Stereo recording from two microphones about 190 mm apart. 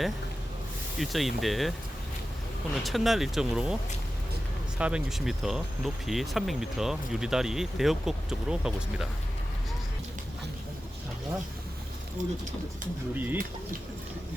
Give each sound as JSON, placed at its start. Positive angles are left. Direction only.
{"t": 0.9, "sound": "speech", "side_deg": 0}
{"t": 2.8, "sound": "speech", "side_deg": 0}
{"t": 4.8, "sound": "speech", "side_deg": -5}
{"t": 12.2, "sound": "speech", "side_deg": -40}
{"t": 13.1, "sound": "speech", "side_deg": -10}